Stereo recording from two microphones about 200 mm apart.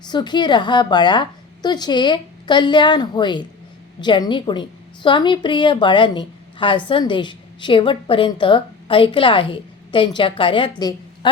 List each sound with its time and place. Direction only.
0.1 s a woman's voice: 20° left (ahead or behind)